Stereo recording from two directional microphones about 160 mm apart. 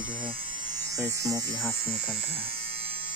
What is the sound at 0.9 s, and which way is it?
Speech, 20° right (ahead or behind).